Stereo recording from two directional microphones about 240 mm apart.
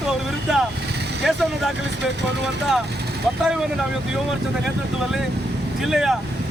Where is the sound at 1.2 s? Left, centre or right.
Centre.